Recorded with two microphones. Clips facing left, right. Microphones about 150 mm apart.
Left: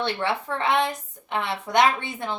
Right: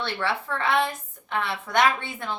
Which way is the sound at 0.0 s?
20° left (ahead or behind).